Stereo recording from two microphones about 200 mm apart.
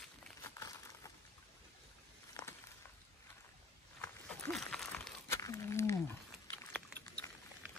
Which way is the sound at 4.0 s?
10° left (ahead or behind).